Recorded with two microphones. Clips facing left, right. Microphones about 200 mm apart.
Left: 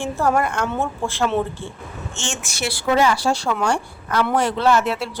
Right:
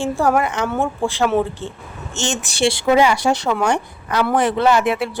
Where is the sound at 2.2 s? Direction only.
35° right (ahead or behind).